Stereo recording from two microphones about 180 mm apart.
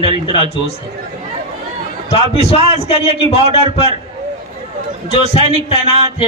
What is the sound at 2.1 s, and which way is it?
A man's voice, 35° left (ahead or behind).